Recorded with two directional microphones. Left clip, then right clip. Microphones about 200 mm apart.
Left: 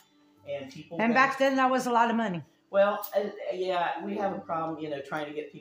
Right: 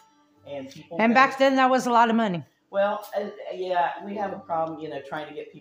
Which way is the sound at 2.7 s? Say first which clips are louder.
Even; 20° left (ahead or behind).